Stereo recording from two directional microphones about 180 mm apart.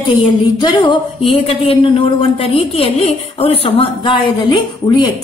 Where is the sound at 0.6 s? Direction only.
25° left (ahead or behind).